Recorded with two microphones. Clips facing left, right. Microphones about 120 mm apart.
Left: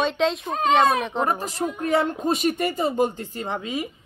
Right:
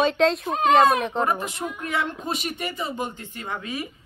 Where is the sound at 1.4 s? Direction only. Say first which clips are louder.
Left 4 dB; 35° left (ahead or behind).